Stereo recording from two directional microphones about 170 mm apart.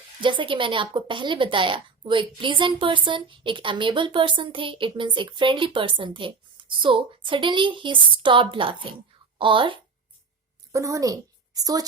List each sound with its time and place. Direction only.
0.2 s a woman's voice: 30° right (ahead or behind)
10.7 s a woman's voice: 20° right (ahead or behind)